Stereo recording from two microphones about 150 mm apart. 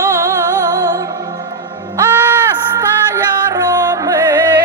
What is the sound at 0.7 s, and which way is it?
Music, 25° right (ahead or behind).